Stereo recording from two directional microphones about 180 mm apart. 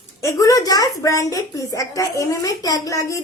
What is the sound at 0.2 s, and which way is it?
A woman's voice, 15° left (ahead or behind).